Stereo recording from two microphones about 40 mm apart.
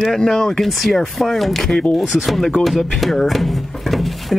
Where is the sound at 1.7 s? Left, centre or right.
Centre.